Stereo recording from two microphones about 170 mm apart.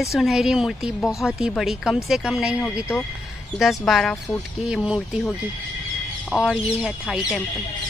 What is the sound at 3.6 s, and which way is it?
Speech, centre (ahead or behind).